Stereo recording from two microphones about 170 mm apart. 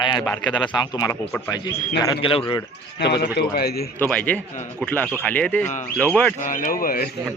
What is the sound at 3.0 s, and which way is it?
Speech, 75° left (ahead or behind).